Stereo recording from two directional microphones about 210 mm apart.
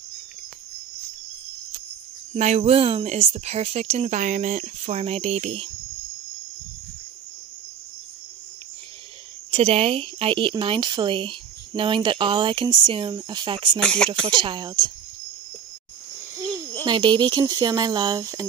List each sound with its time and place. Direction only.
2.3 s speech: 30° right (ahead or behind)
9.5 s speech: 30° right (ahead or behind)
13.7 s speech: 5° left (ahead or behind)
14.2 s speech: 25° right (ahead or behind)
16.8 s speech: 20° right (ahead or behind)